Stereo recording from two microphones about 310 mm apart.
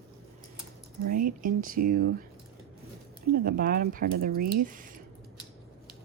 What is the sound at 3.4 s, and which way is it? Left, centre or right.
Speech, right.